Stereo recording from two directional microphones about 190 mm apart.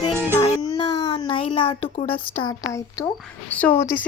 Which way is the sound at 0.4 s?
25° left (ahead or behind).